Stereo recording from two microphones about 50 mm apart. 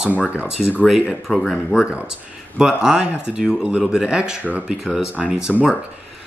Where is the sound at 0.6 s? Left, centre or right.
Centre.